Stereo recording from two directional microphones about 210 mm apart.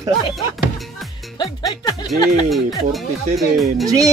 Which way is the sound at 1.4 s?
20° left (ahead or behind).